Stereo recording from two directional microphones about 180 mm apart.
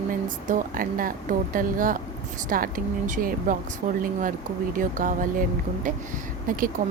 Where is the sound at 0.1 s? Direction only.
50° right (ahead or behind).